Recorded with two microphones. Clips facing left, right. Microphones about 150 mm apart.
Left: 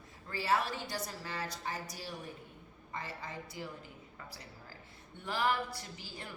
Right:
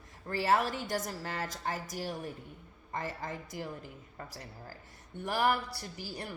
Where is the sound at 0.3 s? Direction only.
50° right (ahead or behind).